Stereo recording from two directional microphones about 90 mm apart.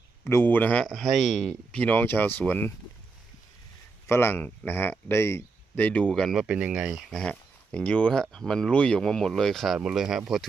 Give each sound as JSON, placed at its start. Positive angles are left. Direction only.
{"t": 0.3, "sound": "speech", "side_deg": 25}
{"t": 0.9, "sound": "speech", "side_deg": 0}
{"t": 1.7, "sound": "speech", "side_deg": 15}
{"t": 4.0, "sound": "a man's voice", "side_deg": 30}
{"t": 5.8, "sound": "speech", "side_deg": 15}
{"t": 6.3, "sound": "speech", "side_deg": -15}
{"t": 7.3, "sound": "speech", "side_deg": 10}